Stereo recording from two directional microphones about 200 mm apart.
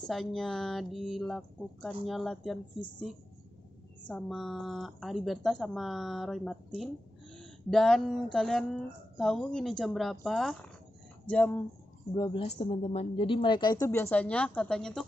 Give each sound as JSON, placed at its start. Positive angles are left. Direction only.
{"t": 0.0, "sound": "speech", "side_deg": 0}
{"t": 4.0, "sound": "speech", "side_deg": 0}
{"t": 12.1, "sound": "speech", "side_deg": 20}